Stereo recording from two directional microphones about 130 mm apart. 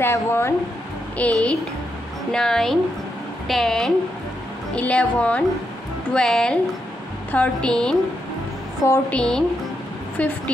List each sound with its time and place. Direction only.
0.0 s a woman's voice: 20° left (ahead or behind)
9.1 s a woman's voice: 5° left (ahead or behind)